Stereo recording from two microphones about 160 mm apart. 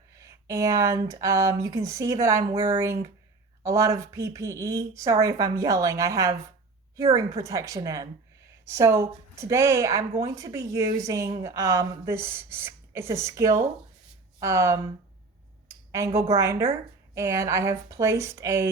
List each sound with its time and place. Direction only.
0.2 s speech: 20° right (ahead or behind)
15.9 s speech: 20° right (ahead or behind)